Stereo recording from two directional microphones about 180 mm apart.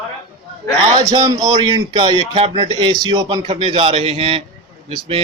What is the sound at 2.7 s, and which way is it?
A man's voice, 20° right (ahead or behind).